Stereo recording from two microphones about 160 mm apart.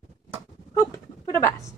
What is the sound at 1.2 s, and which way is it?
Speech, 20° left (ahead or behind).